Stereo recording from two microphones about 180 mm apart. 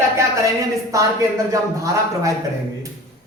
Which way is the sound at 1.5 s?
20° right (ahead or behind).